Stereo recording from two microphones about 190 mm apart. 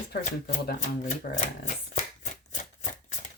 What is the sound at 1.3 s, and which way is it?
Speech, 55° left (ahead or behind).